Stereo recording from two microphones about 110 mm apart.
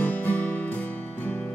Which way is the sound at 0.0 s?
15° left (ahead or behind).